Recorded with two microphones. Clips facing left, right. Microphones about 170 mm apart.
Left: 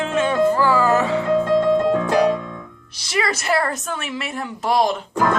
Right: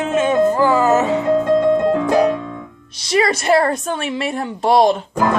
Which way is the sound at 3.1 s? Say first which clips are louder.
Right 6 dB; 30° right (ahead or behind).